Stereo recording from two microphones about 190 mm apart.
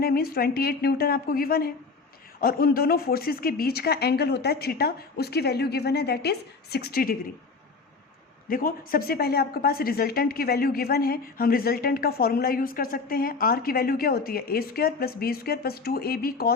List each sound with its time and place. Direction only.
0.0 s a woman's voice: 55° left (ahead or behind)
8.4 s a woman's voice: 50° left (ahead or behind)